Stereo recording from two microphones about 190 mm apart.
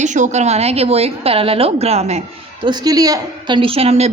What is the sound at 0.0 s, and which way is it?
A woman's voice, 40° right (ahead or behind).